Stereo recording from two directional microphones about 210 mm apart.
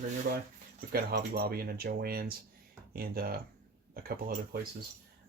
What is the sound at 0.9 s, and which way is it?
Speech, 45° right (ahead or behind).